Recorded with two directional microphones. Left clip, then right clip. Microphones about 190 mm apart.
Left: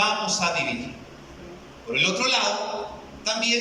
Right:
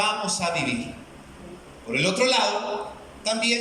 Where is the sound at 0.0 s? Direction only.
50° right (ahead or behind).